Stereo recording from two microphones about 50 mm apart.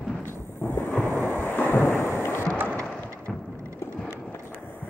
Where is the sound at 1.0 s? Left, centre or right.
Left.